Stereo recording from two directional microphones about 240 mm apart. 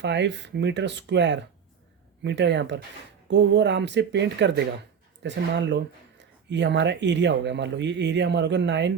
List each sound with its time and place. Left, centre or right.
0.0 s speech: right